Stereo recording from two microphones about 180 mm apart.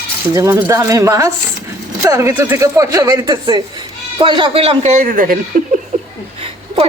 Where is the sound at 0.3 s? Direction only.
15° right (ahead or behind); by 5.4 s 50° right (ahead or behind).